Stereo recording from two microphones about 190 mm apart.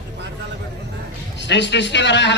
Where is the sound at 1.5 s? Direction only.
70° left (ahead or behind).